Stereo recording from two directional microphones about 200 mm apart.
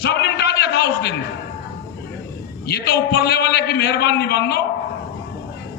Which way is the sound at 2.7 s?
55° left (ahead or behind).